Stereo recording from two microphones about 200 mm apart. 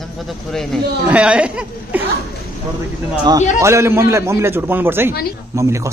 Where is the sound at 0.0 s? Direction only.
Centre (ahead or behind).